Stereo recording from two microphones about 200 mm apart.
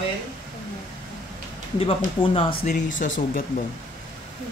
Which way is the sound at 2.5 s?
40° left (ahead or behind).